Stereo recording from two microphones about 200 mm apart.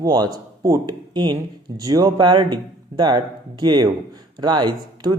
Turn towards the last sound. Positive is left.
turn(degrees=-20)  # may be behind; listen again after turning